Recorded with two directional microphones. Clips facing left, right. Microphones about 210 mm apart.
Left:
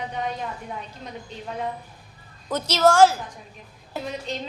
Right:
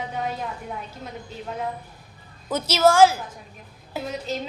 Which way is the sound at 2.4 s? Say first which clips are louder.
Right 1 dB; 5° right (ahead or behind).